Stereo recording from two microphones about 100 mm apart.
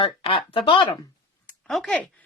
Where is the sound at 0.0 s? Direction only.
65° left (ahead or behind).